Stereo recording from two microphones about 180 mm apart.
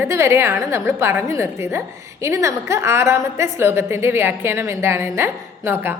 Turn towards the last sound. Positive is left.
turn(degrees=-10)  # may be behind; listen again after turning